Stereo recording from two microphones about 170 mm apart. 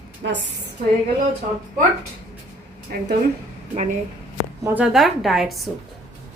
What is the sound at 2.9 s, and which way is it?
Speech, 65° right (ahead or behind).